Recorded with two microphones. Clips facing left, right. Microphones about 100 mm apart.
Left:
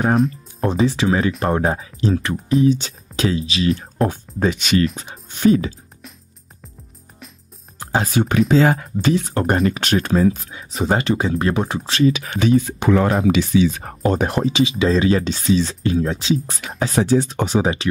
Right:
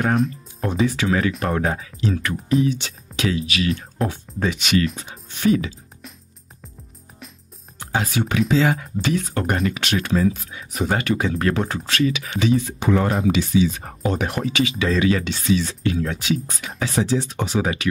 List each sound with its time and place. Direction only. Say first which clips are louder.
0.6 s speech: left 3 dB; 30° left (ahead or behind)
7.8 s music: left 3 dB; 30° left (ahead or behind)
8.2 s speech: left 4 dB; 45° left (ahead or behind)
10.5 s speech: left 3 dB; 25° left (ahead or behind)
12.1 s speech: left 4 dB; 40° left (ahead or behind)
12.7 s speech: left 3 dB; 80° left
14.0 s speech: left 5 dB; 35° left (ahead or behind)
16.6 s speech: left 3 dB; 40° left (ahead or behind)
17.6 s speech: left 3 dB; 30° left (ahead or behind)